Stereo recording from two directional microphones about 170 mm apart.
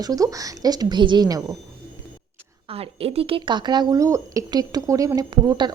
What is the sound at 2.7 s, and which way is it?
Speech, 35° right (ahead or behind).